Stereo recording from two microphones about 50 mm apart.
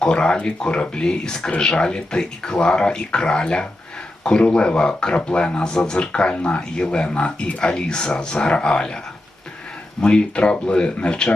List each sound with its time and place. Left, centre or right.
0.0 s speech: centre
10.0 s speech: left